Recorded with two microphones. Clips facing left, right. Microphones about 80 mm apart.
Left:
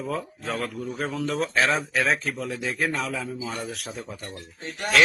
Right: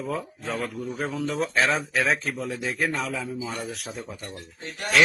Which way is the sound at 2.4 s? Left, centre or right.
Right.